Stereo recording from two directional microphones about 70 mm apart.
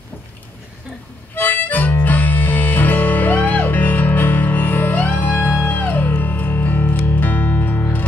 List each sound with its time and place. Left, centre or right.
1.3 s harmonica: left